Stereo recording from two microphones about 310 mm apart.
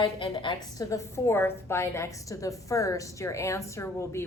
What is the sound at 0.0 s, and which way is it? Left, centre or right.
A woman's voice, centre.